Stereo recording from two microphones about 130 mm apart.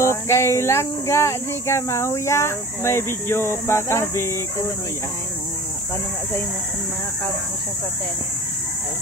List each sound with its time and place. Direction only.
0.0 s speech: 20° left (ahead or behind)